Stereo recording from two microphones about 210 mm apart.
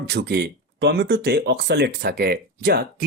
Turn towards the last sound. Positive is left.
turn(degrees=-45)  # may be behind; listen again after turning